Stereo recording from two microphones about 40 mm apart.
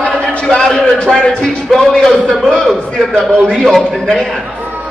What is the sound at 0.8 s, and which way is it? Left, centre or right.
Speech, centre.